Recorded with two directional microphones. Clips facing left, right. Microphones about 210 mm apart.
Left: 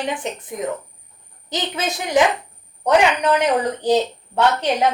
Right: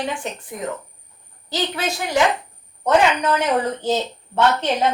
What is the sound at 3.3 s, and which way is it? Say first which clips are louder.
Speech: left 2 dB; 15° left (ahead or behind).